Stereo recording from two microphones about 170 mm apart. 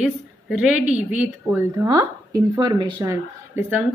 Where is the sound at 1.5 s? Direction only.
15° right (ahead or behind).